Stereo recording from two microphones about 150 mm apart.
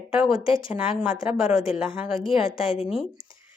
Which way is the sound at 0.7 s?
5° right (ahead or behind).